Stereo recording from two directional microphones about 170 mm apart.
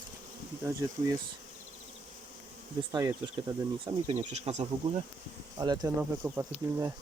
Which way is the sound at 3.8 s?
35° right (ahead or behind).